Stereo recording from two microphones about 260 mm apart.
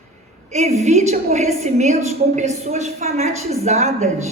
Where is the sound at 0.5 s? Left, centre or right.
Right.